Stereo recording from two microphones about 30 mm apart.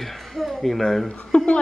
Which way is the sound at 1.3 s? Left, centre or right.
Left.